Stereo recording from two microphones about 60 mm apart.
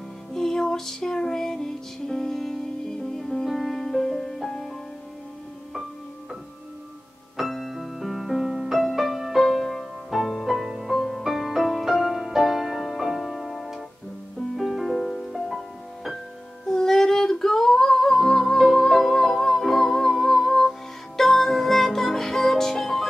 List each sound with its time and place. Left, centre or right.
0.3 s music: centre
7.3 s music: centre